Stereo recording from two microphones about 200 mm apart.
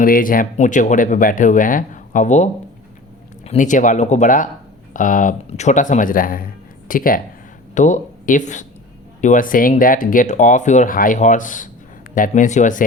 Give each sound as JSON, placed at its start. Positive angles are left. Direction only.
{"t": 0.0, "sound": "speech", "side_deg": 45}